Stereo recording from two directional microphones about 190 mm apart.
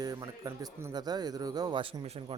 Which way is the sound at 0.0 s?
15° right (ahead or behind).